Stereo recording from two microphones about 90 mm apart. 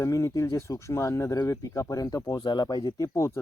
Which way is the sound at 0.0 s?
35° left (ahead or behind).